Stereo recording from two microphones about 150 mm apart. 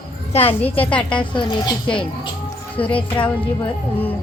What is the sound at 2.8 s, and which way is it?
Speech, 35° left (ahead or behind).